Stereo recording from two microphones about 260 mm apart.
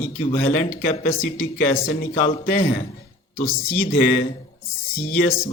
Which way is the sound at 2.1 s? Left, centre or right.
Left.